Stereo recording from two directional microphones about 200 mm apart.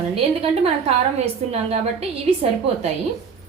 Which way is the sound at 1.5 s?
30° right (ahead or behind).